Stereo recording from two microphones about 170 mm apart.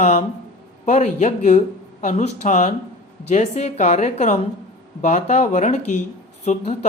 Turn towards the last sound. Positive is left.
turn(degrees=40)  # may be behind; listen again after turning